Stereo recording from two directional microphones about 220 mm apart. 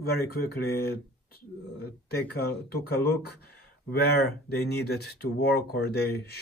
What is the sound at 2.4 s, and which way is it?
Speech, 45° left (ahead or behind).